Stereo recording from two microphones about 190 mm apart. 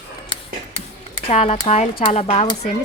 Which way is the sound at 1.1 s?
35° left (ahead or behind).